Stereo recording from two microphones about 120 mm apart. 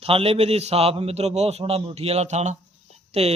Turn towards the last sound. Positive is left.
turn(degrees=-60)  # may be behind; listen again after turning